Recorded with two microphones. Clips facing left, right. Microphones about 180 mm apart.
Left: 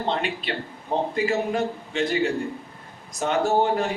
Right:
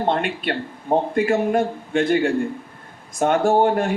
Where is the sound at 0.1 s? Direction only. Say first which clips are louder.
Right 4 dB; 50° right (ahead or behind).